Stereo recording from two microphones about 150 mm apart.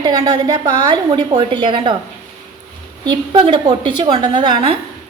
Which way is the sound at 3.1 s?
35° right (ahead or behind).